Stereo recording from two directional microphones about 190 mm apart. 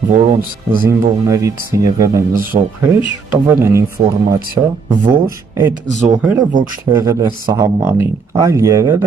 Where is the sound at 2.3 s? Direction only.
45° right (ahead or behind).